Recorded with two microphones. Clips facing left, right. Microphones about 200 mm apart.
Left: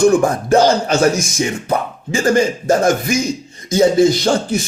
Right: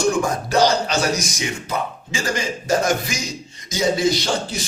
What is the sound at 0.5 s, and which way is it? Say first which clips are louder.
A man's voice: left 5 dB; 50° left (ahead or behind).